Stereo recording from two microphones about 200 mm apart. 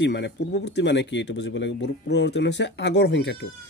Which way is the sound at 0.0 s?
60° left (ahead or behind).